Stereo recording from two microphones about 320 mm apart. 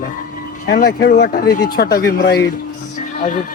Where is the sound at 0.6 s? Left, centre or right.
Left.